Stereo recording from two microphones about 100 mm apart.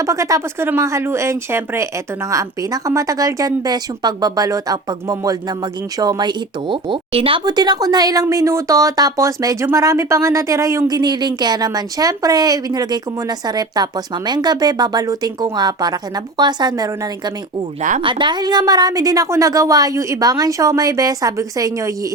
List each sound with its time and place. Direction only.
0.0 s speech: 35° right (ahead or behind); by 7.4 s 65° right (ahead or behind)
7.4 s speech: 45° right (ahead or behind)
18.0 s speech: 55° right (ahead or behind); by 21.9 s 30° right (ahead or behind)